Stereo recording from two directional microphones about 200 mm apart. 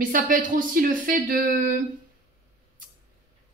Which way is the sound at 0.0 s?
45° right (ahead or behind).